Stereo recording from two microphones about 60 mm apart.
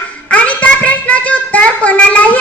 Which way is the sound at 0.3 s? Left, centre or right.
Left.